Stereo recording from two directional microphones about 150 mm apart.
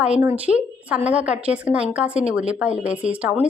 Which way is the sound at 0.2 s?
10° right (ahead or behind).